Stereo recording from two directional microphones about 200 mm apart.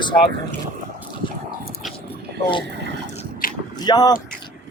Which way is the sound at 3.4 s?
45° left (ahead or behind).